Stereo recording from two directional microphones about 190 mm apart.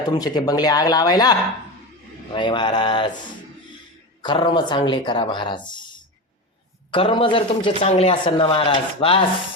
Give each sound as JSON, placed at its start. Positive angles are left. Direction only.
{"t": 0.0, "sound": "speech", "side_deg": 20}
{"t": 4.2, "sound": "speech", "side_deg": 25}
{"t": 6.9, "sound": "speech", "side_deg": 25}